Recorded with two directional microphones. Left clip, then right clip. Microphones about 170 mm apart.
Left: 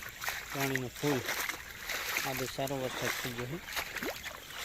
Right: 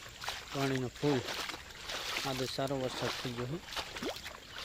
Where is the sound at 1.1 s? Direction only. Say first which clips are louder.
Left 2 dB; 15° left (ahead or behind).